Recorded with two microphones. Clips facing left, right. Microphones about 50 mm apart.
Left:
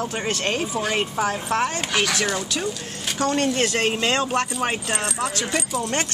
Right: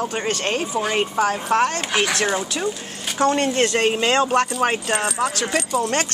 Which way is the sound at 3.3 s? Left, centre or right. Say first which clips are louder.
Right 2 dB; centre.